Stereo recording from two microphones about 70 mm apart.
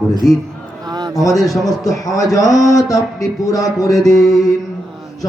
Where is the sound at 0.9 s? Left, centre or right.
Right.